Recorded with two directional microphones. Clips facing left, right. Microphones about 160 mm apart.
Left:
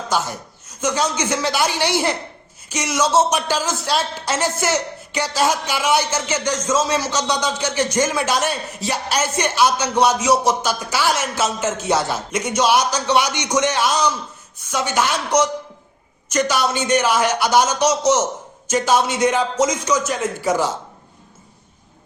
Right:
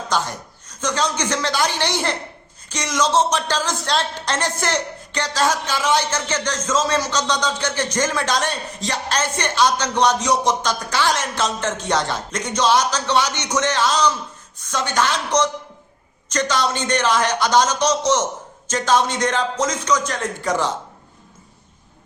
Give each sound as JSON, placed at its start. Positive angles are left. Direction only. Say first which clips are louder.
{"t": 0.1, "sound": "a man's voice", "louder": "left 1 dB", "side_deg": 10}